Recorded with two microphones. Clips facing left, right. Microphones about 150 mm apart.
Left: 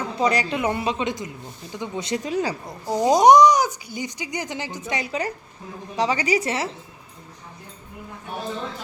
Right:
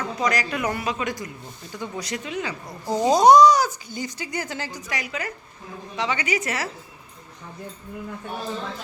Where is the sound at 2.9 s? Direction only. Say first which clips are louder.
Left 1 dB; 15° left (ahead or behind); by 6.7 s 30° left (ahead or behind).